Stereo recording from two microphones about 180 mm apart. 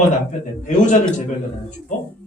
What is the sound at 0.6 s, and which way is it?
Speech, 45° left (ahead or behind).